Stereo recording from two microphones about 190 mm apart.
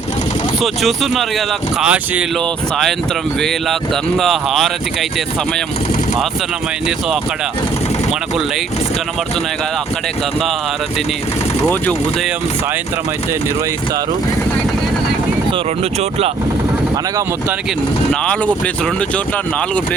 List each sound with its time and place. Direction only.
0.6 s speech: centre (ahead or behind)
4.2 s speech: centre (ahead or behind)
15.5 s speech: 30° right (ahead or behind)
18.1 s speech: 5° left (ahead or behind)